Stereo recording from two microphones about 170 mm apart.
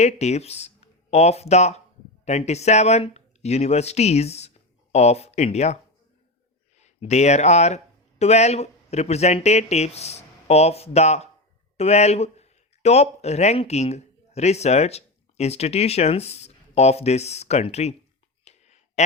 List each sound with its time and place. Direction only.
0.0 s speech: 40° left (ahead or behind)
6.7 s speech: 40° left (ahead or behind)
18.4 s a sound: 40° left (ahead or behind)